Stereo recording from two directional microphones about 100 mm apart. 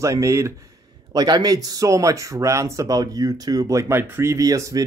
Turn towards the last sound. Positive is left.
turn(degrees=-35)  # may be behind; listen again after turning